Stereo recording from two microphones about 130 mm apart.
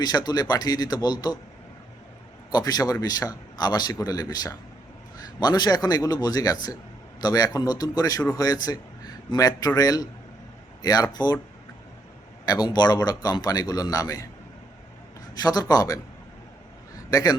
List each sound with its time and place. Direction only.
0.0 s a man's voice: 30° left (ahead or behind)
2.5 s a man's voice: 30° left (ahead or behind)
12.5 s a man's voice: 30° left (ahead or behind)
15.4 s a man's voice: 30° left (ahead or behind)
17.1 s a man's voice: 25° left (ahead or behind)